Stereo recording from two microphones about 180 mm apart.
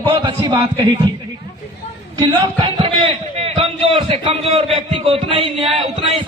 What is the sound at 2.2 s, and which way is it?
A man's voice, 30° right (ahead or behind).